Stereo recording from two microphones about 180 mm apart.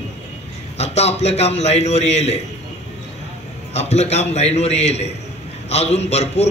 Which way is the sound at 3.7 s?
35° left (ahead or behind).